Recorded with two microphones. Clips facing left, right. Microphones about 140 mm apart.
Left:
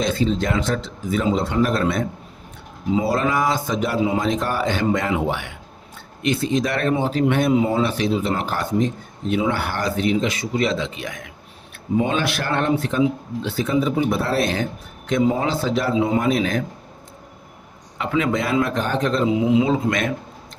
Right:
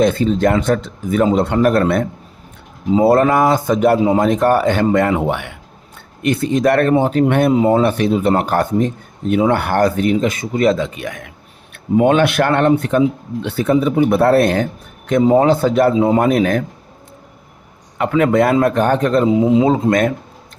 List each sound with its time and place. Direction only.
0.0 s a man's voice: 55° right (ahead or behind)
15.2 s a man's voice: 45° right (ahead or behind)
17.9 s a man's voice: 55° right (ahead or behind)